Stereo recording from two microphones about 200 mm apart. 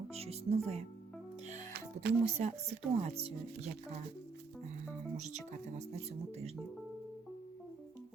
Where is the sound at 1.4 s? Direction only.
35° right (ahead or behind).